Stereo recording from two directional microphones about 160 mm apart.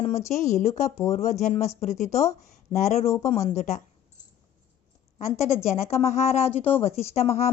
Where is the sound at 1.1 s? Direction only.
45° left (ahead or behind).